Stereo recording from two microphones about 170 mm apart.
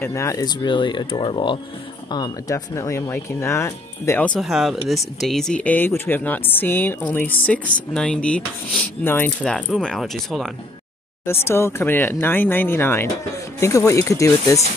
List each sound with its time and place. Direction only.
0.0 s speech: 15° left (ahead or behind); by 10.5 s centre (ahead or behind)
11.2 s speech: 15° left (ahead or behind)